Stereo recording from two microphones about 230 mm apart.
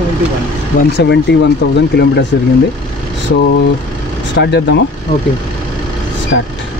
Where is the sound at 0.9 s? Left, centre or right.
Left.